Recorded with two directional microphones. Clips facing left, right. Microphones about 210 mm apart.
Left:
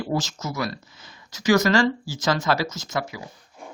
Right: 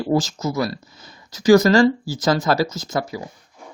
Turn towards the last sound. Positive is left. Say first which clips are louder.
# right 4 dB
turn(degrees=-35)  # may be behind; listen again after turning